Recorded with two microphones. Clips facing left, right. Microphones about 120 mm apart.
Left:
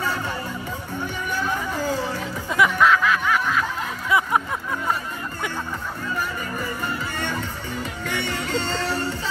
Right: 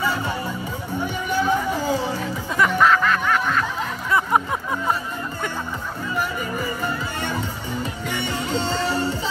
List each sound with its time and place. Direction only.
1.0 s music: 15° right (ahead or behind)
2.5 s snicker: 5° left (ahead or behind)
7.2 s music: 10° right (ahead or behind)